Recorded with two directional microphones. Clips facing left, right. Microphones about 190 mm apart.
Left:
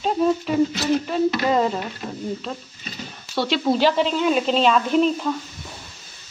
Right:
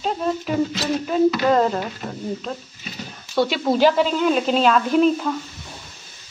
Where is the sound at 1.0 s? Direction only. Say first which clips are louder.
Right 3 dB; centre (ahead or behind).